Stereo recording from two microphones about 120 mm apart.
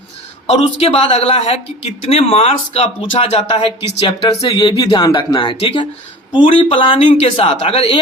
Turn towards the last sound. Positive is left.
turn(degrees=60)  # may be behind; listen again after turning